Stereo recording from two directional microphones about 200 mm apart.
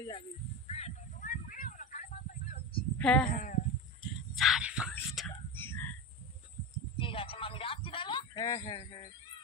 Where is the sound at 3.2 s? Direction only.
40° left (ahead or behind).